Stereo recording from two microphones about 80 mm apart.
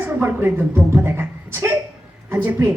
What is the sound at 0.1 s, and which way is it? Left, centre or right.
Speech, right.